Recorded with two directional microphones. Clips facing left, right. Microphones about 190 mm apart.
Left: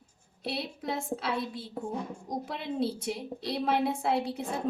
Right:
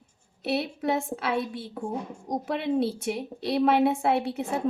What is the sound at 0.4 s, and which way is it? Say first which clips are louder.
A woman's voice: right 7 dB; 70° right (ahead or behind).